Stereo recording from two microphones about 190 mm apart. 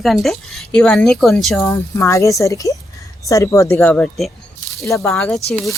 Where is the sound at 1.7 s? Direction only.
15° left (ahead or behind).